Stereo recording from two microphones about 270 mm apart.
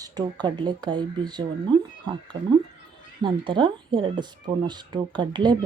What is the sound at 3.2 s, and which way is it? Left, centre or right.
Speech, centre.